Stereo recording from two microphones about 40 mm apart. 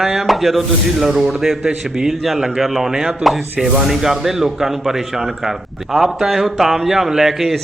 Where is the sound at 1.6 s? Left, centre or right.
Centre.